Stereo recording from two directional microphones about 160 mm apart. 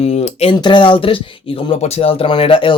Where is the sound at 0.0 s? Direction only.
40° left (ahead or behind).